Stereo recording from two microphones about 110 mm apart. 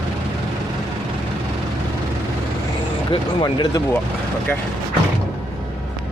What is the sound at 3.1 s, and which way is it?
Speech, 45° left (ahead or behind).